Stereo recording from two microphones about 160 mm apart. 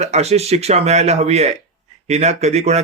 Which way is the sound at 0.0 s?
45° right (ahead or behind).